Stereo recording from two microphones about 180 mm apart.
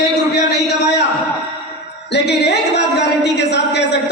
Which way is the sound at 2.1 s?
65° left (ahead or behind).